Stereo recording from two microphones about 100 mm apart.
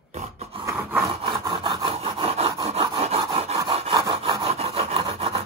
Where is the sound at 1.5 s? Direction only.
55° right (ahead or behind); by 3.6 s 80° right.